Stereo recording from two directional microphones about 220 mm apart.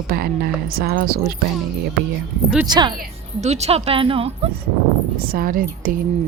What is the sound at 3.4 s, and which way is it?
Speech, 30° right (ahead or behind).